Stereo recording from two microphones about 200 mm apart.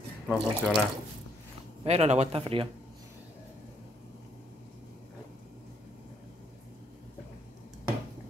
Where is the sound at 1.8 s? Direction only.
30° right (ahead or behind).